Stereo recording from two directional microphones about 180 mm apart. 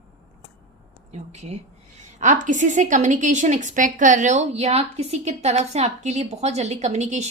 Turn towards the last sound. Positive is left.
turn(degrees=-40)  # may be behind; listen again after turning